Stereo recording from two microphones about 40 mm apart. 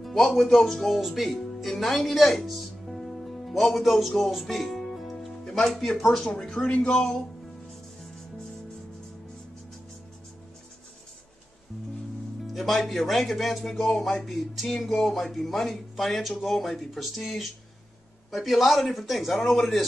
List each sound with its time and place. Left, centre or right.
0.4 s a man's voice: centre
4.1 s music: centre
5.6 s speech: centre
12.5 s a man's voice: centre